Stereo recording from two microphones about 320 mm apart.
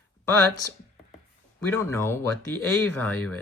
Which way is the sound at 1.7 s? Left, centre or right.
Centre.